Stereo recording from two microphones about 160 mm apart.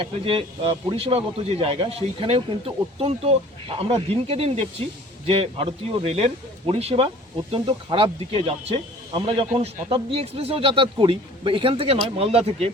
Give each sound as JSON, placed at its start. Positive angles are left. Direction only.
{"t": 0.0, "sound": "speech", "side_deg": -35}